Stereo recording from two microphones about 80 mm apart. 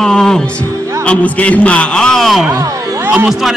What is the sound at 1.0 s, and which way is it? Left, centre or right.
A man's voice, centre.